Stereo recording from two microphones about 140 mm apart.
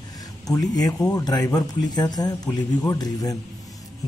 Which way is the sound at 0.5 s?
25° left (ahead or behind).